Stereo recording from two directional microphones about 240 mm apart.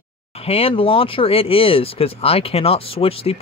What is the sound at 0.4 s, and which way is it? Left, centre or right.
Speech, left.